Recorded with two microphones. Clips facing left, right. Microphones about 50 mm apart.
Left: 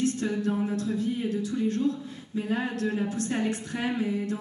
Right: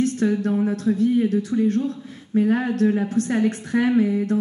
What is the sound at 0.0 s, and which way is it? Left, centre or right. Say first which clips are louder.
A woman's voice: right 6 dB; right.